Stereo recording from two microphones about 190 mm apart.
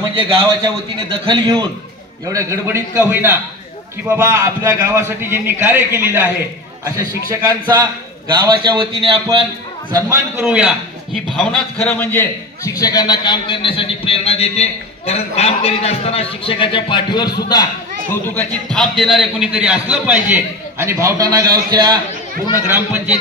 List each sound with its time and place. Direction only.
0.1 s a man's voice: 30° right (ahead or behind); by 5.9 s 10° right (ahead or behind)
7.0 s a man's voice: 20° right (ahead or behind)
9.9 s a man's voice: 15° right (ahead or behind); by 17.4 s 25° left (ahead or behind)
18.1 s a man's voice: 10° left (ahead or behind); by 21.9 s 20° right (ahead or behind)
22.7 s a man's voice: 10° right (ahead or behind)